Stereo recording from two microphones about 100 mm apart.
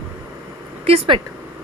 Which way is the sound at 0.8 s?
80° right.